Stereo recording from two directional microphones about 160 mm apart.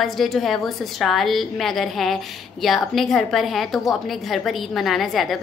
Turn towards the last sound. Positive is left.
turn(degrees=0)  # may be behind; listen again after turning